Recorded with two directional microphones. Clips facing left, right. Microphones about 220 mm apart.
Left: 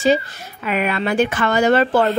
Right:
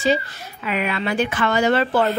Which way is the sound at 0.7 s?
50° left (ahead or behind).